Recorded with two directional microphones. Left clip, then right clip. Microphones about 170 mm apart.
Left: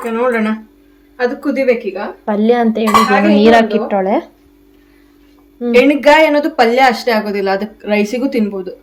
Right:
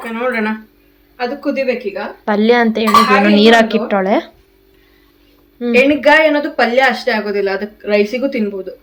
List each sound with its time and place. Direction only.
0.0 s a woman's voice: 70° left (ahead or behind)
2.2 s speech: 5° right (ahead or behind)
5.8 s a woman's voice: 75° left (ahead or behind)